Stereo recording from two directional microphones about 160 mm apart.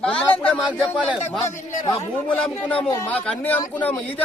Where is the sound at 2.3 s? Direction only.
5° left (ahead or behind).